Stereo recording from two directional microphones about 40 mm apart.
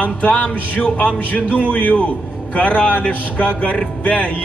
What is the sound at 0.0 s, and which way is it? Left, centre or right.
Speech, left.